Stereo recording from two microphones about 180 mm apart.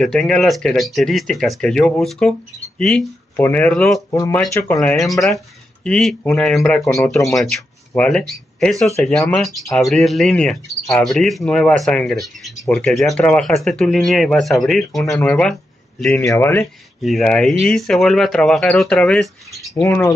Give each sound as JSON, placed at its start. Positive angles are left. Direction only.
{"t": 0.0, "sound": "speech", "side_deg": 0}
{"t": 4.1, "sound": "speech", "side_deg": 15}
{"t": 4.7, "sound": "speech", "side_deg": 0}
{"t": 17.0, "sound": "speech", "side_deg": 0}
{"t": 19.7, "sound": "speech", "side_deg": 15}